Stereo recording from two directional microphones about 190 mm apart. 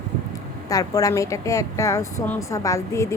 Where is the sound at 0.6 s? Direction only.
20° left (ahead or behind).